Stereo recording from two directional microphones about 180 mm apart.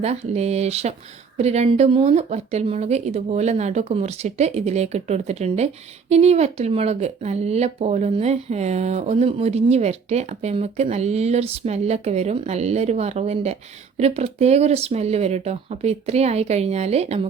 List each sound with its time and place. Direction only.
0.0 s speech: 35° right (ahead or behind)